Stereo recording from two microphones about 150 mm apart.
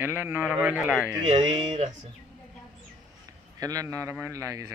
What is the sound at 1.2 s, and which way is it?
Speech, 45° right (ahead or behind).